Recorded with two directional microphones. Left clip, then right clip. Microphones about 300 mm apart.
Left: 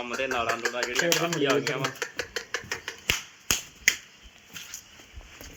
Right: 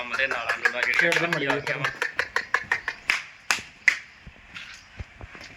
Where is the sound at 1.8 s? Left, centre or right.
Right.